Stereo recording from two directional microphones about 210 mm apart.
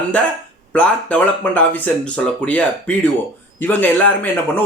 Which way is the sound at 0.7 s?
5° left (ahead or behind).